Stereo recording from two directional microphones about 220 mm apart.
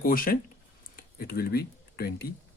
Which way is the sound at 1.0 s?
40° left (ahead or behind).